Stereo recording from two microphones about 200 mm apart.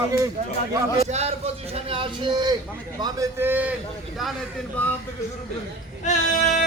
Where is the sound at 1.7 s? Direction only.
25° right (ahead or behind); by 3.7 s 10° right (ahead or behind).